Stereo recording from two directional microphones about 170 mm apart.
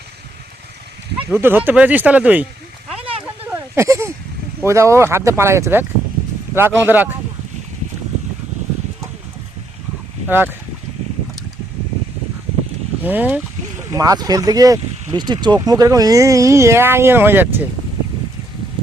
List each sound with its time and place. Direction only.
1.3 s speech: 15° right (ahead or behind)
2.9 s a sound: 35° right (ahead or behind)
3.4 s a sound: 15° right (ahead or behind)
4.6 s speech: 15° right (ahead or behind)
10.2 s speech: 10° right (ahead or behind)
13.0 s speech: 10° right (ahead or behind)